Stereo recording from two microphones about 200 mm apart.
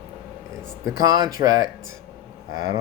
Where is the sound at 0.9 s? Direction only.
20° right (ahead or behind).